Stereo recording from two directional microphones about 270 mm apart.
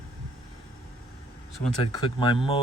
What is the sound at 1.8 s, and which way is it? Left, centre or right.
Speech, centre.